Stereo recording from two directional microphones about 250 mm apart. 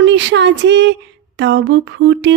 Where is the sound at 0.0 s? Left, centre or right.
Right.